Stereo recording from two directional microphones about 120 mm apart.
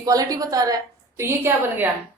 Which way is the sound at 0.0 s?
30° right (ahead or behind).